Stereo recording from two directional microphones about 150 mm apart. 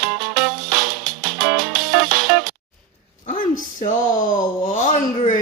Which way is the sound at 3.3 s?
60° left (ahead or behind).